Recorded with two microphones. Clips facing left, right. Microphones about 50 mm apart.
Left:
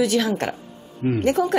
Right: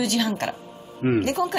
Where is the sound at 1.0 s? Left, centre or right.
Right.